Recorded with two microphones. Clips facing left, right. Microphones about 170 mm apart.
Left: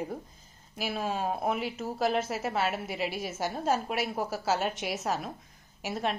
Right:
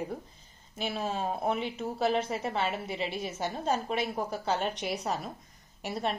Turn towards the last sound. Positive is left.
turn(degrees=0)  # may be behind; listen again after turning